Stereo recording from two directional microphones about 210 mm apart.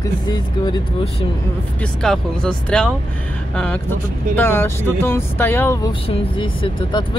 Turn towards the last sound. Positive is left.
turn(degrees=25)  # may be behind; listen again after turning